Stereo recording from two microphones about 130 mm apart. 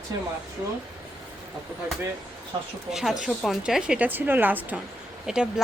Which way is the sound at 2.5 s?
40° right (ahead or behind).